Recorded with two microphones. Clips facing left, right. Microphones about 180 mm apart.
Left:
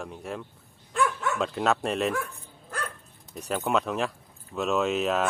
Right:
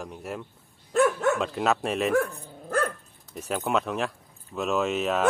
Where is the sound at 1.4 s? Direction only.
Centre (ahead or behind).